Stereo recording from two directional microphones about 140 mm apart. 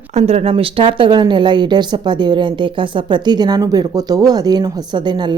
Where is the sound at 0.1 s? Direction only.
50° right (ahead or behind).